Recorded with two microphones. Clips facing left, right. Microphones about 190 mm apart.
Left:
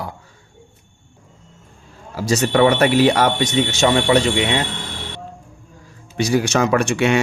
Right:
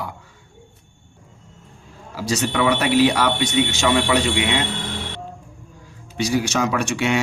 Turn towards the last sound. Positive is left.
turn(degrees=55)  # may be behind; listen again after turning